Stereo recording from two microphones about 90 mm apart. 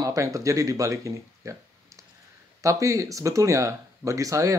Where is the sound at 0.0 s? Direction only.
35° right (ahead or behind).